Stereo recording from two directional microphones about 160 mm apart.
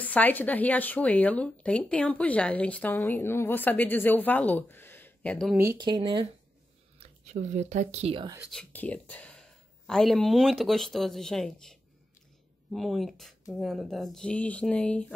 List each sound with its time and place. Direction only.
0.0 s speech: 10° left (ahead or behind)
5.8 s speech: 25° right (ahead or behind)
7.2 s speech: 50° right (ahead or behind)
8.5 s speech: 5° left (ahead or behind)